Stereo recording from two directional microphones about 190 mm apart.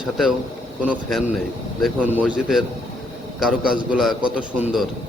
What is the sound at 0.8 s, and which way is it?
A man's voice, 5° right (ahead or behind).